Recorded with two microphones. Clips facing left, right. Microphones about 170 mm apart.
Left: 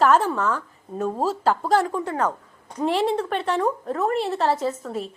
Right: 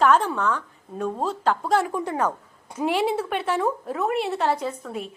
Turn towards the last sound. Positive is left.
turn(degrees=0)  # may be behind; listen again after turning